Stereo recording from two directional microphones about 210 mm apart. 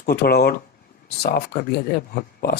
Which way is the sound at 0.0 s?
45° left (ahead or behind).